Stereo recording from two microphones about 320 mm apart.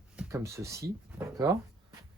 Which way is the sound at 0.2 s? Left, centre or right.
Centre.